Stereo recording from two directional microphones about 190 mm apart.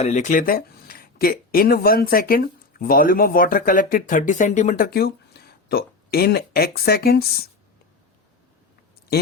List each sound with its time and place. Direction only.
0.0 s speech: 40° left (ahead or behind)